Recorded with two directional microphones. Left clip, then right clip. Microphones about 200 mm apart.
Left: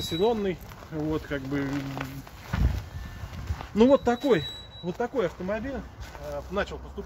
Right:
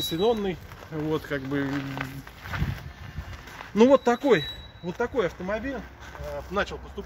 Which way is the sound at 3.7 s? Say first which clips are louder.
Right 2 dB; 30° right (ahead or behind).